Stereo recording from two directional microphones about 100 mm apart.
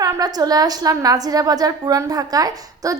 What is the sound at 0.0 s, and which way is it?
A woman's voice, 40° right (ahead or behind).